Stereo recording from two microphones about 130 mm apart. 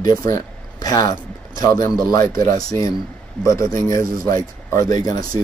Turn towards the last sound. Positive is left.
turn(degrees=30)  # may be behind; listen again after turning